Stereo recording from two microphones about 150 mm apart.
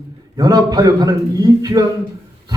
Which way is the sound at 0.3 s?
25° right (ahead or behind).